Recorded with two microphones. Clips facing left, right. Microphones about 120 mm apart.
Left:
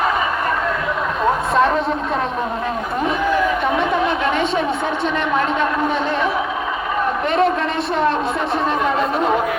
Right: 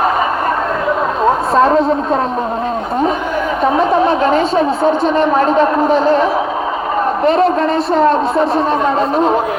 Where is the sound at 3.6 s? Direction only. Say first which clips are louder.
Right 6 dB; 35° right (ahead or behind).